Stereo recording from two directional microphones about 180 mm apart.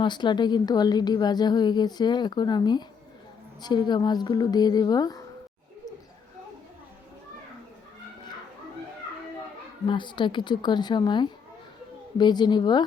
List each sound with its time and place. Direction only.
0.0 s a woman's voice: 25° left (ahead or behind)
9.8 s a woman's voice: 25° left (ahead or behind)